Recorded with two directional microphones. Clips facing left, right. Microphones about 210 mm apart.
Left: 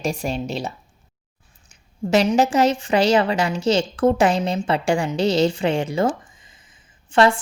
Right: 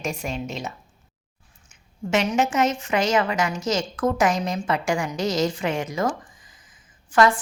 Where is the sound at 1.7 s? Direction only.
35° left (ahead or behind).